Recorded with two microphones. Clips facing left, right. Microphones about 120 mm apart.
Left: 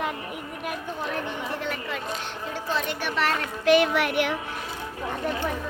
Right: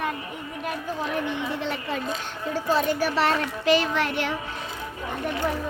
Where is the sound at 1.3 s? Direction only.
30° right (ahead or behind).